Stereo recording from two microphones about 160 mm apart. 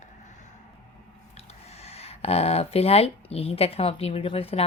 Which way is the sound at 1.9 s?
40° left (ahead or behind).